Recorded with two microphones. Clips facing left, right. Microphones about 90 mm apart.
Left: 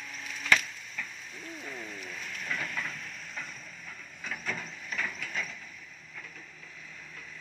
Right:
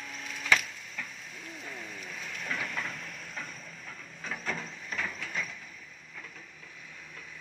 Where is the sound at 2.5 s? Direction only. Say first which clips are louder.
Even; 20° right (ahead or behind).